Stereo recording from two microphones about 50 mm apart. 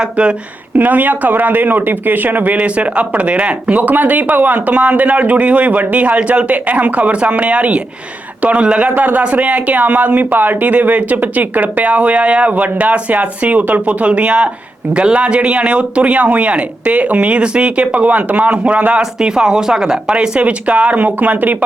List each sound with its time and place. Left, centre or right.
0.0 s speech: right
0.8 s speech: right
4.7 s speech: right
9.0 s speech: right
19.3 s speech: centre; by 21.6 s right